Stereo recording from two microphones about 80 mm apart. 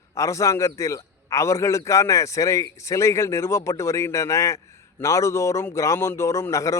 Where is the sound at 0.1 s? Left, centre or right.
Left.